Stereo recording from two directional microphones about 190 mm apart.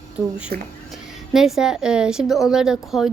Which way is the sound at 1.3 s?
Centre (ahead or behind).